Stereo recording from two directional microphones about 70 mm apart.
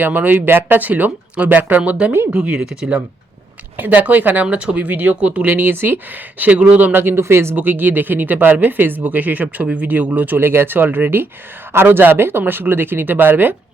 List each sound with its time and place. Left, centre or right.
0.0 s speech: right
3.8 s speech: right
6.4 s speech: centre